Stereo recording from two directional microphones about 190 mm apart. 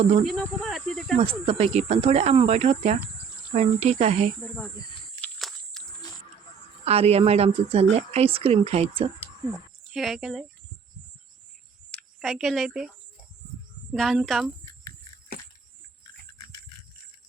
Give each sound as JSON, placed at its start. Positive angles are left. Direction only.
{"t": 0.3, "sound": "cricket", "side_deg": 0}
{"t": 1.1, "sound": "speech", "side_deg": -30}
{"t": 4.6, "sound": "cricket", "side_deg": 20}
{"t": 5.2, "sound": "a sound", "side_deg": 0}
{"t": 6.8, "sound": "speech", "side_deg": -35}
{"t": 9.9, "sound": "a woman's voice", "side_deg": 0}
{"t": 11.9, "sound": "a woman's voice", "side_deg": 0}
{"t": 13.9, "sound": "a woman's voice", "side_deg": 0}